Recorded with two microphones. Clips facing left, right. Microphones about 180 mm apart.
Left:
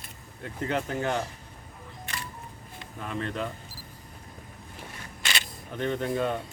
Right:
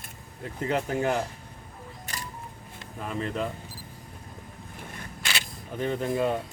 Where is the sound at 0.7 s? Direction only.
5° right (ahead or behind).